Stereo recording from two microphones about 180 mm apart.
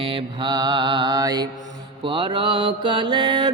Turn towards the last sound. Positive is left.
turn(degrees=-25)  # may be behind; listen again after turning